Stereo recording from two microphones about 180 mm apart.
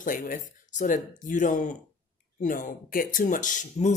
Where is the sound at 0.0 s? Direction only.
50° left (ahead or behind).